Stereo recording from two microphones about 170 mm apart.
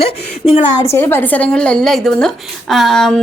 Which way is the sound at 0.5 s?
35° left (ahead or behind).